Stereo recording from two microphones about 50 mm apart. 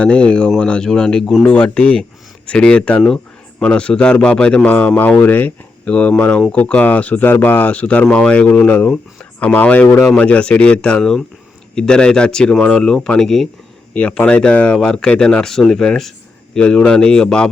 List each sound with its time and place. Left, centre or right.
0.0 s a man's voice: left
1.7 s speech: left
4.7 s speech: left
5.8 s speech: left
6.6 s speech: left
7.8 s a man's voice: left; by 13.5 s centre
13.9 s speech: left
15.4 s a man's voice: centre